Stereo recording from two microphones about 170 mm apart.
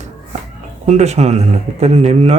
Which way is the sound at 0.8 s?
40° right (ahead or behind).